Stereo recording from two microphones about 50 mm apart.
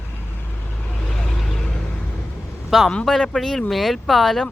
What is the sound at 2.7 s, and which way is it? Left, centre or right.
Speech, centre.